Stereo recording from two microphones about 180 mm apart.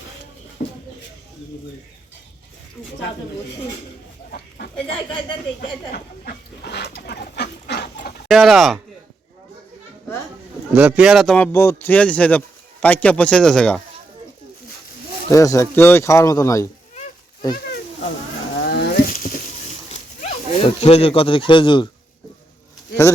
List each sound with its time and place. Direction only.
0.6 s a sound: 50° left (ahead or behind)
4.3 s chicken: 60° left (ahead or behind)
5.9 s dog: 60° left (ahead or behind)
7.9 s chicken: 60° left (ahead or behind)
8.3 s speech: centre (ahead or behind)
10.8 s speech: 10° right (ahead or behind)
11.5 s speech: 15° left (ahead or behind)
15.3 s speech: 15° left (ahead or behind)
18.5 s a sound: 65° left (ahead or behind)
19.9 s speech: 35° left (ahead or behind)